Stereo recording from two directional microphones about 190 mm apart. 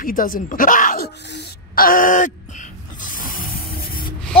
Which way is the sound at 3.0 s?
45° left (ahead or behind).